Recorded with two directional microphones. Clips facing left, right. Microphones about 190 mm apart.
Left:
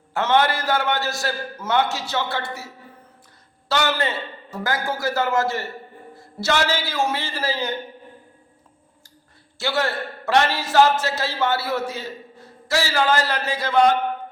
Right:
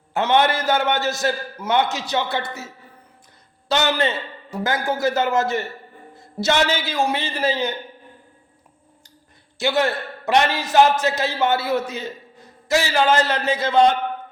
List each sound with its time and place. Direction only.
0.1 s a man's voice: 20° right (ahead or behind)
3.7 s a man's voice: 20° right (ahead or behind)
9.6 s a man's voice: 15° right (ahead or behind)